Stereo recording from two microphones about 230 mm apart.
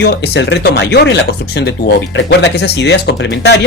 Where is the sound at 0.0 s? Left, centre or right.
Left.